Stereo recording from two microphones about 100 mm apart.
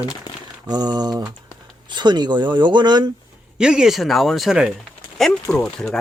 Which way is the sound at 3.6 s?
10° right (ahead or behind).